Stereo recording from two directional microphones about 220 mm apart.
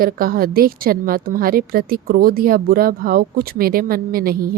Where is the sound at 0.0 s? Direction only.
40° right (ahead or behind).